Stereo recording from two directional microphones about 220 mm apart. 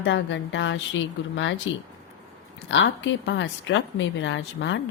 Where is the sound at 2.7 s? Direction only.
55° left (ahead or behind).